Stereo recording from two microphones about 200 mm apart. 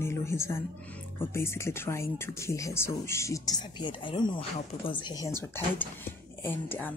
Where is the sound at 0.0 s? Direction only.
15° left (ahead or behind).